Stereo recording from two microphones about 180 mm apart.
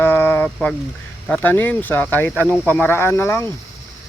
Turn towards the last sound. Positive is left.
turn(degrees=15)  # may be behind; listen again after turning